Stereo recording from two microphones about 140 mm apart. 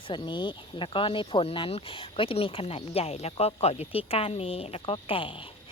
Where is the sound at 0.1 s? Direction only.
35° left (ahead or behind).